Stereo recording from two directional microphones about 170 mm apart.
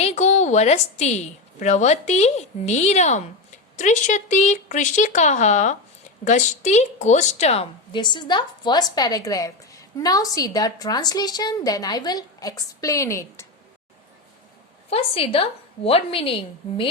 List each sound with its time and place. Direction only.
0.0 s a woman's voice: 40° left (ahead or behind); by 13.5 s 15° left (ahead or behind)
14.8 s a woman's voice: 35° left (ahead or behind)